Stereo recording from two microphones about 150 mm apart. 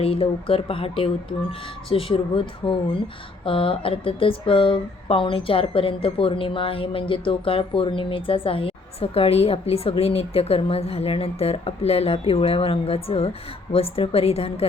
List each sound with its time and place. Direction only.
0.0 s speech: 40° left (ahead or behind)